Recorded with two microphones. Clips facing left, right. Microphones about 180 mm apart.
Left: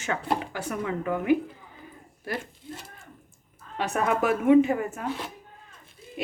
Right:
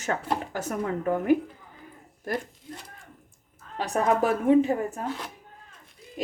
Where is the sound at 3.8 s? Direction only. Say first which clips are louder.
Right 1 dB; 35° right (ahead or behind).